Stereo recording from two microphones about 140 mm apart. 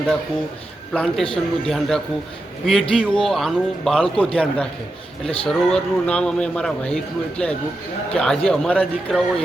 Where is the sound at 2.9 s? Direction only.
5° left (ahead or behind).